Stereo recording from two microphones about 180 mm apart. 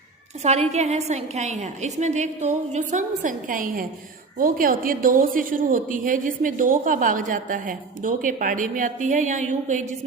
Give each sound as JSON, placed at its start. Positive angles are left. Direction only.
{"t": 0.7, "sound": "a woman's voice", "side_deg": -35}